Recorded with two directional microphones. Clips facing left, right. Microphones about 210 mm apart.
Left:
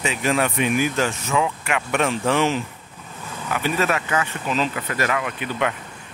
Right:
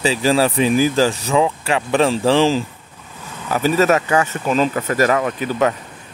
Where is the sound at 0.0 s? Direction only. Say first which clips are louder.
Right 6 dB; 30° right (ahead or behind).